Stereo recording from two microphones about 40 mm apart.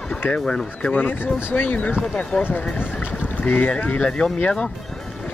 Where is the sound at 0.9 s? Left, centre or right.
Left.